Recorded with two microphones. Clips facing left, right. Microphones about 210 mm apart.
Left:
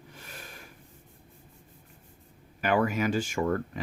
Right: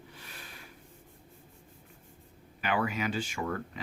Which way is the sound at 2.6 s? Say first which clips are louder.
Left 5 dB; 45° left (ahead or behind).